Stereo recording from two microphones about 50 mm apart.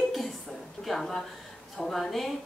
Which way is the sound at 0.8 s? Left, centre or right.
Centre.